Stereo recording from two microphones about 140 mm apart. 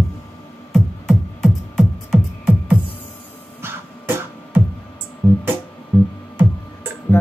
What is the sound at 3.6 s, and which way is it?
Music, 15° right (ahead or behind).